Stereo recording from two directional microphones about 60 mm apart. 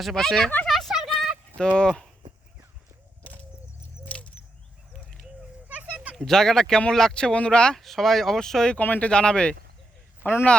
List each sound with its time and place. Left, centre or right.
0.0 s speech: centre
0.7 s a sound: centre
1.5 s speech: centre
4.0 s bird: left
5.8 s a sound: centre
6.1 s speech: centre
7.8 s speech: centre
8.8 s speech: left
10.2 s speech: left